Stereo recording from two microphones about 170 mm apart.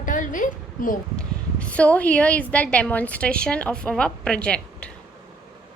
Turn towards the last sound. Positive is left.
turn(degrees=5)  # may be behind; listen again after turning